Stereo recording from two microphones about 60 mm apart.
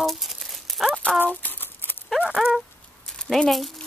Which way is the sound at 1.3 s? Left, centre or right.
Left.